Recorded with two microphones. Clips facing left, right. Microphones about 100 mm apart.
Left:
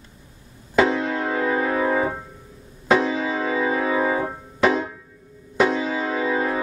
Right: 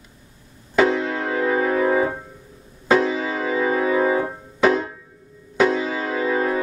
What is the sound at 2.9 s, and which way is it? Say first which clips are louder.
Music: right 1 dB; centre (ahead or behind).